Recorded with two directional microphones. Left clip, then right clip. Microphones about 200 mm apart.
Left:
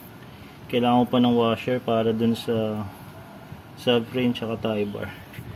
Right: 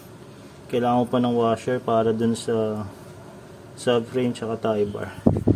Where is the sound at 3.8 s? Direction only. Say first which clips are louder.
Right 1 dB; centre (ahead or behind).